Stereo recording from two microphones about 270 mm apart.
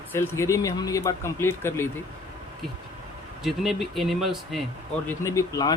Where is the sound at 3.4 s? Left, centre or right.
Centre.